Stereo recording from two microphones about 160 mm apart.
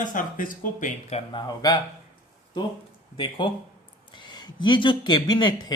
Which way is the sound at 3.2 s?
30° left (ahead or behind).